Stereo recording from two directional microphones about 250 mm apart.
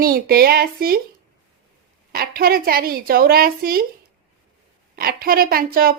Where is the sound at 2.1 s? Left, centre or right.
Right.